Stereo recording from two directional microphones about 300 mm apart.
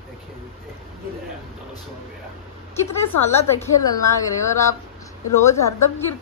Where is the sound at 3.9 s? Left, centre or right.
Centre.